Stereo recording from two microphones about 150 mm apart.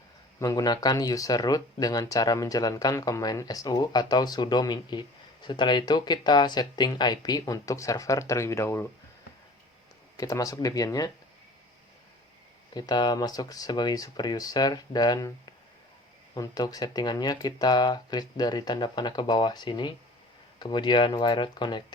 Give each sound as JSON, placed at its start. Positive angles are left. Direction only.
{"t": 0.3, "sound": "speech", "side_deg": 25}
{"t": 10.2, "sound": "speech", "side_deg": 20}
{"t": 12.7, "sound": "speech", "side_deg": 25}
{"t": 16.3, "sound": "speech", "side_deg": 25}